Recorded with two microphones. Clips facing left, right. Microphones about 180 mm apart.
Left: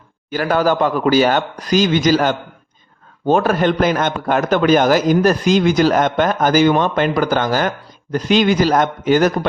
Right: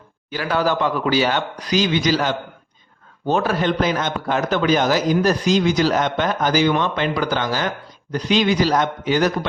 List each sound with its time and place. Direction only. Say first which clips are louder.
0.3 s a man's voice: left 4 dB; 45° left (ahead or behind)